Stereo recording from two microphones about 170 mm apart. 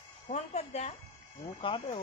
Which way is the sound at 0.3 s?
40° left (ahead or behind).